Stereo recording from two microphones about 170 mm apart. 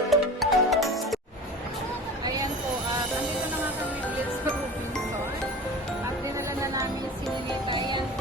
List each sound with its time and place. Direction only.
0.1 s music: centre (ahead or behind)
7.7 s music: 25° right (ahead or behind)